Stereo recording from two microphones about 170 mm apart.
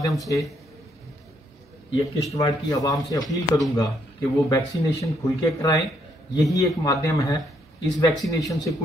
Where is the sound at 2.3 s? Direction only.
20° left (ahead or behind).